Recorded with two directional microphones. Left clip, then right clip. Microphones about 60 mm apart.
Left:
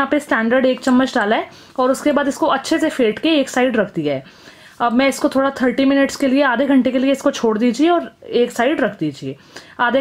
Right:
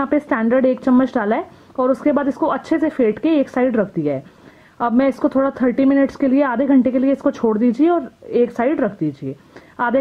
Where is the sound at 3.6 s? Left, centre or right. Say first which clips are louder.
Left 1 dB; centre.